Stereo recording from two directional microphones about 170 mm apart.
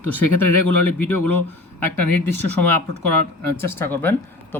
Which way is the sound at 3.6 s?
15° left (ahead or behind).